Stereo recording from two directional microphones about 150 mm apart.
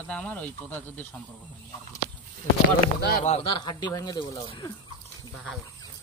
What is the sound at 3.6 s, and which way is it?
Speech, 30° left (ahead or behind).